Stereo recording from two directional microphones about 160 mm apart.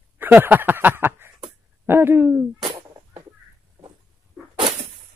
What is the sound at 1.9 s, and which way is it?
Hoot, 15° right (ahead or behind).